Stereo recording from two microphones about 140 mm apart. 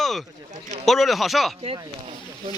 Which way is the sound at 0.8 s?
Centre (ahead or behind).